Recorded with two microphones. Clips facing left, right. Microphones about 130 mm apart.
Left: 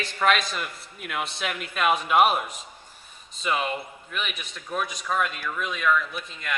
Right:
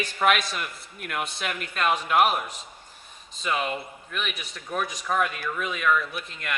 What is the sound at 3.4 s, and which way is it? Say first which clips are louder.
Speech: left 1 dB; centre (ahead or behind).